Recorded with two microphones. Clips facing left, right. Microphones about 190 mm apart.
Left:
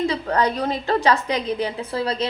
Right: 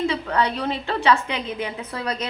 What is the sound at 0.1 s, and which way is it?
A woman's voice, 40° left (ahead or behind).